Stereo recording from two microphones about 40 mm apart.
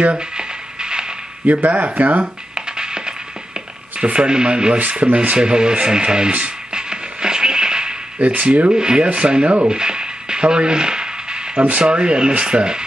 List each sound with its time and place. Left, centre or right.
0.0 s a sound: right
1.4 s speech: right
2.5 s music: centre
4.0 s speech: right
4.7 s speech: right
6.7 s music: right
8.2 s speech: right
8.7 s speech: right
9.7 s music: right
11.8 s speech: right